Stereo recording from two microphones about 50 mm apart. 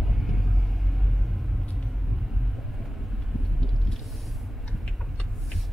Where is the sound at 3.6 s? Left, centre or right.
Centre.